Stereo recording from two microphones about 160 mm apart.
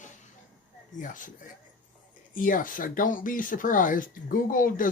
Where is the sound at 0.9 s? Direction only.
55° left (ahead or behind).